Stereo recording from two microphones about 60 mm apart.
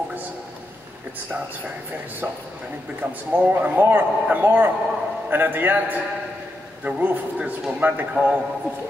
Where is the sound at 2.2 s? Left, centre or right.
Right.